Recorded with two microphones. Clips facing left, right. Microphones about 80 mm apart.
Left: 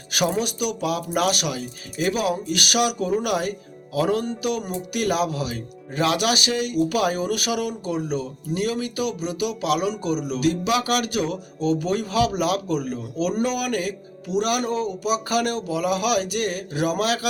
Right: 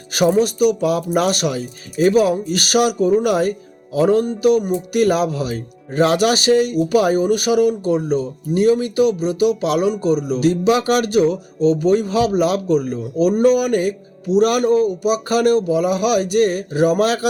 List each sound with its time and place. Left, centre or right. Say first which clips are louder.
0.1 s speech: right 8 dB; right
14.3 s speech: right 8 dB; right
15.0 s speech: right 7 dB; right